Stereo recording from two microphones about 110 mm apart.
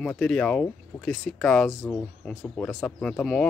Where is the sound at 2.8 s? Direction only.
10° left (ahead or behind).